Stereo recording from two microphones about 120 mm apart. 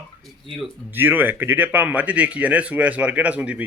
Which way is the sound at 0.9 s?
15° right (ahead or behind).